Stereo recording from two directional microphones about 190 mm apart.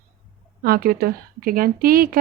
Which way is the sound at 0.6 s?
55° right (ahead or behind).